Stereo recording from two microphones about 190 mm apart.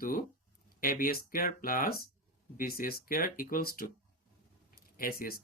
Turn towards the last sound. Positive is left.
turn(degrees=50)  # may be behind; listen again after turning